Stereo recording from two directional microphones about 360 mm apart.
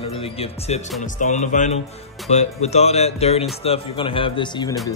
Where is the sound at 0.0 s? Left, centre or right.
Centre.